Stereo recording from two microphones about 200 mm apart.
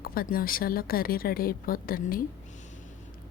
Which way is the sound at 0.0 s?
45° left (ahead or behind).